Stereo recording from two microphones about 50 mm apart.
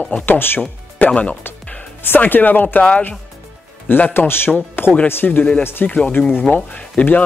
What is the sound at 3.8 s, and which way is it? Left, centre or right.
Speech, left.